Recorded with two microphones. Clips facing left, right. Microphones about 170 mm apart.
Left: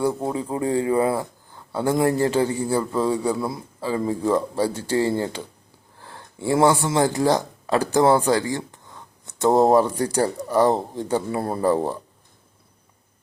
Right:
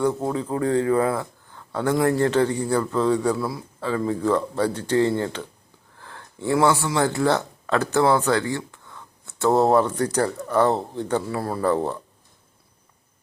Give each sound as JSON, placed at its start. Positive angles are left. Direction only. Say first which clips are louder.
{"t": 0.0, "sound": "a man's voice", "louder": "even", "side_deg": 10}
{"t": 1.5, "sound": "a sound", "louder": "left 1 dB", "side_deg": 10}
{"t": 2.1, "sound": "a man's voice", "louder": "right 1 dB", "side_deg": 10}
{"t": 3.3, "sound": "speech", "louder": "even", "side_deg": 20}
{"t": 4.2, "sound": "a man's voice", "louder": "left 1 dB", "side_deg": 10}
{"t": 6.1, "sound": "a sound", "louder": "left 1 dB", "side_deg": 15}
{"t": 6.5, "sound": "speech", "louder": "left 2 dB", "side_deg": 25}
{"t": 8.4, "sound": "a sound", "louder": "even", "side_deg": 15}
{"t": 10.0, "sound": "a man's voice", "louder": "left 1 dB", "side_deg": 10}
{"t": 11.3, "sound": "speech", "louder": "left 2 dB", "side_deg": 25}
{"t": 11.7, "sound": "a man's voice", "louder": "left 1 dB", "side_deg": 10}